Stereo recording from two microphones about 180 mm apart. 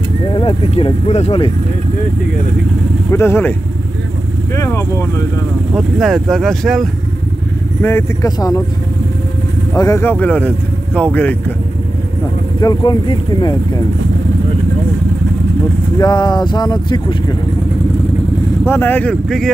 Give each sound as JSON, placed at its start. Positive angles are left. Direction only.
{"t": 0.3, "sound": "speech", "side_deg": 30}
{"t": 3.1, "sound": "speech", "side_deg": 15}
{"t": 4.6, "sound": "speech", "side_deg": 15}
{"t": 5.8, "sound": "speech", "side_deg": 0}
{"t": 7.8, "sound": "speech", "side_deg": 15}
{"t": 9.8, "sound": "speech", "side_deg": 15}
{"t": 12.5, "sound": "speech", "side_deg": 25}
{"t": 16.0, "sound": "speech", "side_deg": 25}
{"t": 18.7, "sound": "speech", "side_deg": 10}